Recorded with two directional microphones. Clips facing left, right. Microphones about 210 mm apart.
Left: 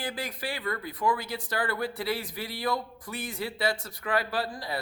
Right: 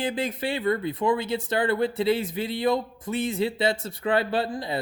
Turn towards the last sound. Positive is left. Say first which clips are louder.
# right 6 dB
turn(degrees=-25)  # may be behind; listen again after turning